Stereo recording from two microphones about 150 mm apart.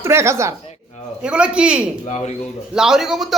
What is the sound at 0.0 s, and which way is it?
Speech, 20° right (ahead or behind).